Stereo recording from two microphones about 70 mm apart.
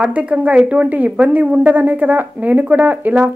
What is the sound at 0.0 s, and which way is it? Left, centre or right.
A woman's voice, centre.